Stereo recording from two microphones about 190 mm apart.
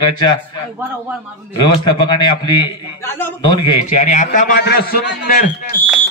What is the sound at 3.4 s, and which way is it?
Speech, 25° left (ahead or behind).